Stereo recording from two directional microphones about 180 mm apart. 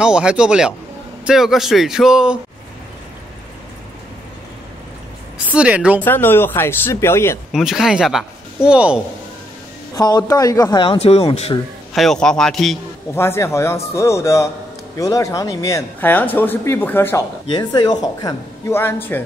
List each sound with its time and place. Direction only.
0.0 s a man's voice: 5° right (ahead or behind)
5.5 s a woman's voice: 5° right (ahead or behind)
6.0 s speech: 10° left (ahead or behind)
7.5 s a man's voice: centre (ahead or behind)
9.9 s speech: 20° left (ahead or behind)
11.9 s a man's voice: centre (ahead or behind)
13.1 s speech: 15° left (ahead or behind)
17.5 s speech: 25° left (ahead or behind)